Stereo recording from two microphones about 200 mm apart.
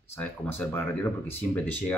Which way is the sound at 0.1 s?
10° left (ahead or behind).